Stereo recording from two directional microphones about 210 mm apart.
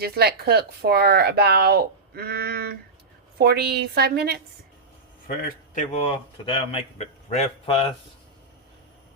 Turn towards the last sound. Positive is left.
turn(degrees=25)  # may be behind; listen again after turning